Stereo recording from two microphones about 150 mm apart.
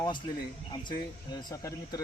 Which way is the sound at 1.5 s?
25° left (ahead or behind).